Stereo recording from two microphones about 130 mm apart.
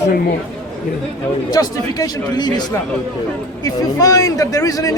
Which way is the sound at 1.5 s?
30° left (ahead or behind).